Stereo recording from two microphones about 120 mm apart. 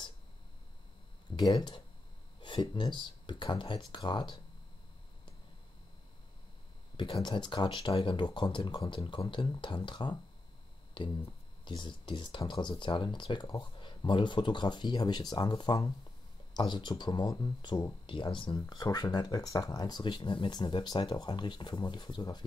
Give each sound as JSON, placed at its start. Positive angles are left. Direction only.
{"t": 1.3, "sound": "speech", "side_deg": 35}
{"t": 7.0, "sound": "speech", "side_deg": 40}
{"t": 11.6, "sound": "speech", "side_deg": 40}